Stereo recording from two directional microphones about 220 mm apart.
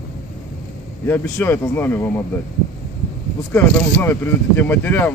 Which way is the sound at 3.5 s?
10° left (ahead or behind).